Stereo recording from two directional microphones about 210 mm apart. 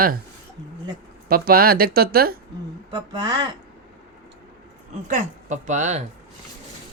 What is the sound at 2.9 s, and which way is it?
Speech, 20° right (ahead or behind).